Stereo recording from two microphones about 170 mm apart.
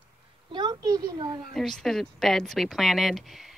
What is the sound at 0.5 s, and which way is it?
Speech, 25° right (ahead or behind).